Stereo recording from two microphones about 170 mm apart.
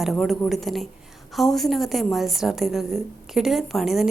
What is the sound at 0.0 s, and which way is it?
Speech, centre (ahead or behind).